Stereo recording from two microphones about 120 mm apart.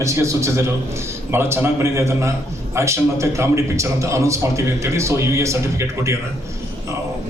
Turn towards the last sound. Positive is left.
turn(degrees=-25)  # may be behind; listen again after turning